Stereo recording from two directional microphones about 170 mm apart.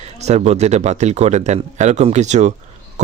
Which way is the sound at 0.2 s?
40° right (ahead or behind).